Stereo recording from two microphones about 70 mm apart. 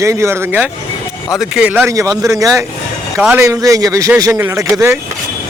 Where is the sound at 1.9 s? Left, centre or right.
Right.